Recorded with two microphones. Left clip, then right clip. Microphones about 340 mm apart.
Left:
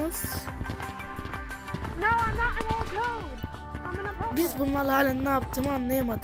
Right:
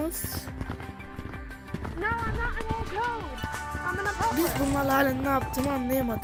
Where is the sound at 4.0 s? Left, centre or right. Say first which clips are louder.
Right 5 dB; right.